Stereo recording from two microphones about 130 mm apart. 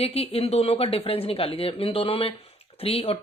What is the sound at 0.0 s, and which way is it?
Speech, 50° left (ahead or behind).